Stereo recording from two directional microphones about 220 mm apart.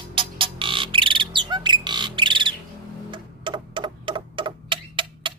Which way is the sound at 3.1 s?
20° right (ahead or behind).